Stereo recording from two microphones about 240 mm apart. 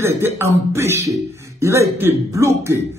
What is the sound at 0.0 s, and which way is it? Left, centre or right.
Speech, centre.